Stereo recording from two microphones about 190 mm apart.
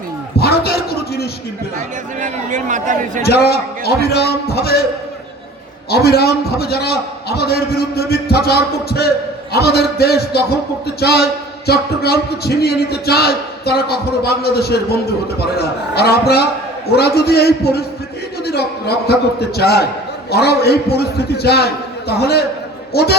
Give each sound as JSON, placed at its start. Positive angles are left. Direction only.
{"t": 0.3, "sound": "a sound", "side_deg": 55}
{"t": 2.2, "sound": "speech", "side_deg": -40}
{"t": 3.2, "sound": "a man's voice", "side_deg": 55}
{"t": 5.9, "sound": "a man's voice", "side_deg": 55}